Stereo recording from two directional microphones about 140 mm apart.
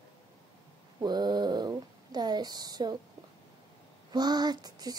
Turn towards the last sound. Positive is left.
turn(degrees=-30)  # may be behind; listen again after turning